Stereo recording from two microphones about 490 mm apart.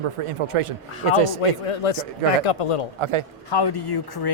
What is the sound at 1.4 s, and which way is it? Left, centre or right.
A man's voice, left.